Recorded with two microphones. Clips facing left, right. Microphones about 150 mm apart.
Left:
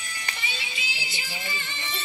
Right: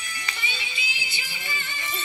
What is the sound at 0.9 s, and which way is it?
Music, 30° left (ahead or behind).